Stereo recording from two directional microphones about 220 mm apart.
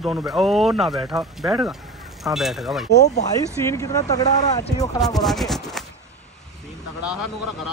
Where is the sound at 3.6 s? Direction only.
15° left (ahead or behind).